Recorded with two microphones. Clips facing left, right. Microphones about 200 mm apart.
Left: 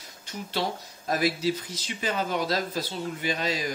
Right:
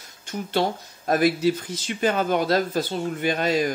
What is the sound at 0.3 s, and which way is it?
Speech, 55° right (ahead or behind).